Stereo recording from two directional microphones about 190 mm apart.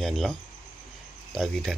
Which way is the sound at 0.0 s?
Centre (ahead or behind).